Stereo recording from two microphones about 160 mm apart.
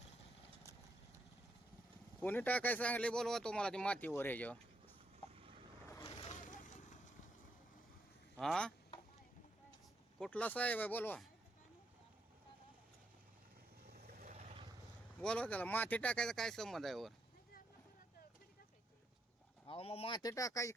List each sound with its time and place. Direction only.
2.2 s speech: 10° left (ahead or behind)
6.2 s vehicle: 50° left (ahead or behind)
8.4 s speech: 5° left (ahead or behind)
10.2 s speech: 5° left (ahead or behind)
14.3 s boat: 45° right (ahead or behind)
15.2 s speech: 5° left (ahead or behind)
19.6 s speech: 35° left (ahead or behind); by 20.7 s 20° left (ahead or behind)